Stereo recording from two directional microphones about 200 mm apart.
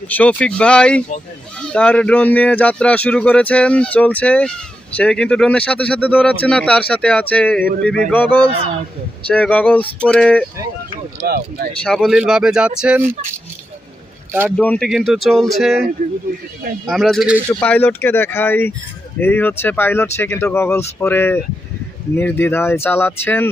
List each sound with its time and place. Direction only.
0.1 s speech: 5° left (ahead or behind)
11.3 s speech: 50° right (ahead or behind)
11.8 s speech: centre (ahead or behind)
14.5 s speech: 5° left (ahead or behind)
17.6 s speech: 10° left (ahead or behind)